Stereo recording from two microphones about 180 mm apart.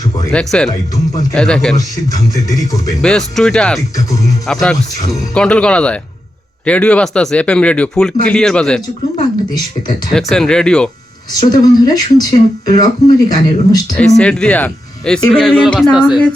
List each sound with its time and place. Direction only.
0.3 s speech: 5° left (ahead or behind)
1.7 s speech: 20° left (ahead or behind)
3.0 s speech: 5° left (ahead or behind)
9.1 s speech: 25° left (ahead or behind)
10.1 s speech: centre (ahead or behind)
11.3 s speech: 20° left (ahead or behind)
14.2 s speech: 5° left (ahead or behind)